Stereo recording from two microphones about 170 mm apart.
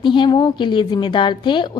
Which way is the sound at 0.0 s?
25° left (ahead or behind).